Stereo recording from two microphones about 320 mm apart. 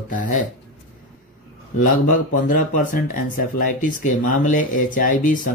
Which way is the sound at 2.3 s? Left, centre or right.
Left.